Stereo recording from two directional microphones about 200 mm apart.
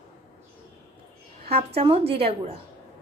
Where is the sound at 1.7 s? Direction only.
30° right (ahead or behind).